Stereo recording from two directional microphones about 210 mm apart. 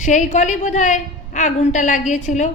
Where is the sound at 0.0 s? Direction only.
35° left (ahead or behind).